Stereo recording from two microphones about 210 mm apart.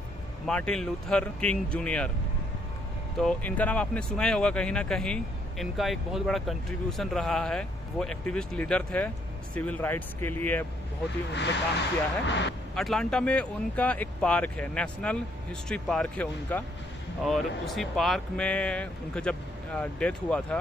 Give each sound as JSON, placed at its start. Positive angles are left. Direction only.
{"t": 0.5, "sound": "speech", "side_deg": 5}
{"t": 3.2, "sound": "speech", "side_deg": 5}
{"t": 11.3, "sound": "speech", "side_deg": 55}
{"t": 12.7, "sound": "speech", "side_deg": 0}